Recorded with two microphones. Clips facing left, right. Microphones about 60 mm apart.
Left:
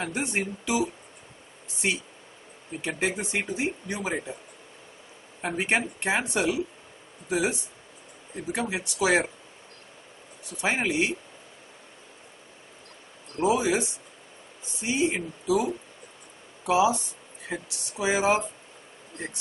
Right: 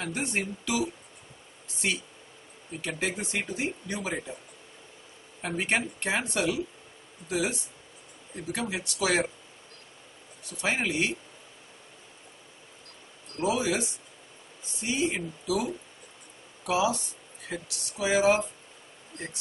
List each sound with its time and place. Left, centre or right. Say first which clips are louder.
0.0 s speech: left 2 dB; centre
5.4 s speech: left 2 dB; centre
10.6 s speech: left 2 dB; centre
13.4 s speech: left 4 dB; left